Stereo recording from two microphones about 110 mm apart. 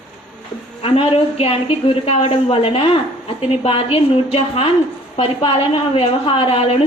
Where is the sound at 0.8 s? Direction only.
60° left (ahead or behind).